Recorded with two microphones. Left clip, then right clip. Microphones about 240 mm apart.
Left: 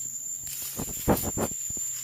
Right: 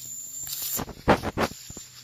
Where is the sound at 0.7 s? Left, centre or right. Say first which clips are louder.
Right 5 dB; right.